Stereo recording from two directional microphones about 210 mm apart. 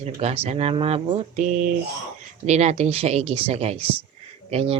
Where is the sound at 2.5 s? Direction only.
30° right (ahead or behind).